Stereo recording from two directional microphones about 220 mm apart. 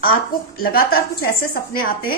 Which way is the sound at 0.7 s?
45° left (ahead or behind).